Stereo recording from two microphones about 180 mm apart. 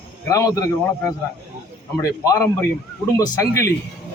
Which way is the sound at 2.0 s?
20° left (ahead or behind).